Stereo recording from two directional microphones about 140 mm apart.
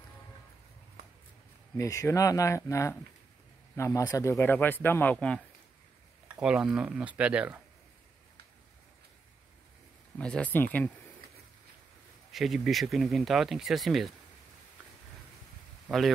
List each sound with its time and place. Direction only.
1.8 s speech: 20° left (ahead or behind)
6.2 s speech: 5° right (ahead or behind)
10.1 s speech: 10° left (ahead or behind)
12.3 s speech: centre (ahead or behind)